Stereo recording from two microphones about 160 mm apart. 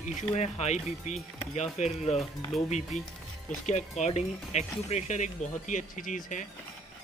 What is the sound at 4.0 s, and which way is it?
Speech, 45° left (ahead or behind).